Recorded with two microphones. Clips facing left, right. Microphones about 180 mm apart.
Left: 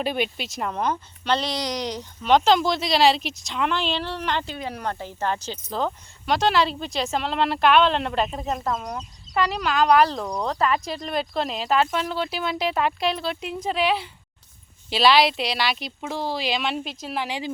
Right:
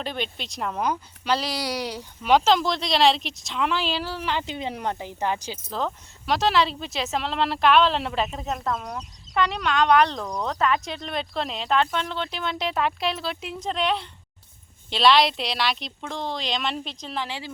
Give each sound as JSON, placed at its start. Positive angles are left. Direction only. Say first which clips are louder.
{"t": 0.0, "sound": "speech", "louder": "left 5 dB", "side_deg": 10}
{"t": 4.4, "sound": "speech", "louder": "right 1 dB", "side_deg": -20}